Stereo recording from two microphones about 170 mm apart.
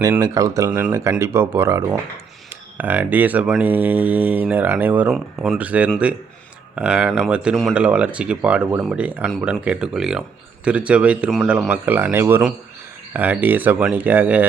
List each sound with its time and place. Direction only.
0.2 s speech: 20° right (ahead or behind)